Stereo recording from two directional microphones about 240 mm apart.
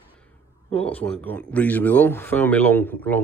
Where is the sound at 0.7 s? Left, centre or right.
Centre.